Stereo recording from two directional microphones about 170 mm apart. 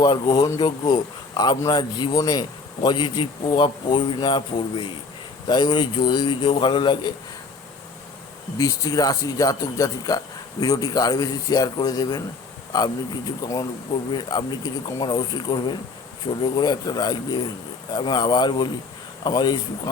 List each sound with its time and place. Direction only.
0.0 s speech: 25° left (ahead or behind)
8.5 s speech: 20° left (ahead or behind)
13.4 s speech: 20° left (ahead or behind)